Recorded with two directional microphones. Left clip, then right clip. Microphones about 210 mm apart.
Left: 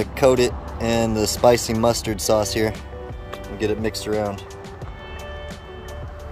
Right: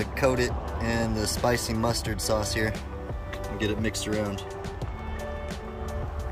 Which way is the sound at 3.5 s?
20° left (ahead or behind).